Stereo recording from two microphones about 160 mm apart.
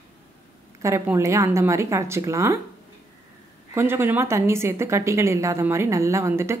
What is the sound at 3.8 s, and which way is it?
A woman's voice, 15° right (ahead or behind).